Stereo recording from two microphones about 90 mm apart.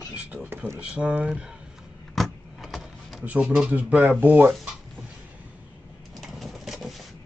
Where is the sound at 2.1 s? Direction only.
Centre (ahead or behind).